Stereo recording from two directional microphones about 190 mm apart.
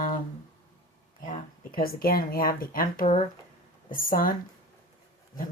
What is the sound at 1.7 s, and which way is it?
Speech, 50° left (ahead or behind).